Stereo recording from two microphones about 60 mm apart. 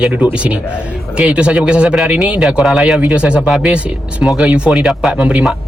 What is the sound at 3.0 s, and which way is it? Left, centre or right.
Speech, centre.